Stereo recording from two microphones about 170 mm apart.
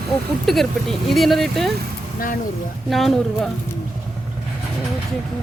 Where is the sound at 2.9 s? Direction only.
Centre (ahead or behind).